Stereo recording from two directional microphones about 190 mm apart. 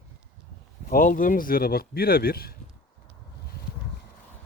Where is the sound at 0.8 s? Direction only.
45° left (ahead or behind).